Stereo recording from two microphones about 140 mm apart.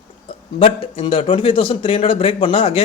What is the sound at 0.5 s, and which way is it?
A man's voice, 40° left (ahead or behind).